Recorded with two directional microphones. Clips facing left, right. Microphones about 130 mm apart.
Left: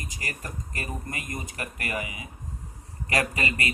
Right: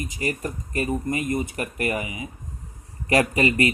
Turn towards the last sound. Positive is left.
turn(degrees=-30)  # may be behind; listen again after turning